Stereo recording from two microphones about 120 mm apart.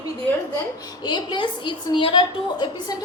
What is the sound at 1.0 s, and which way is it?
A woman's voice, 40° left (ahead or behind).